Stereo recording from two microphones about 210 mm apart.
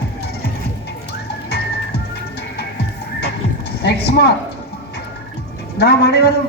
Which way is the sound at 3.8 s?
50° left (ahead or behind).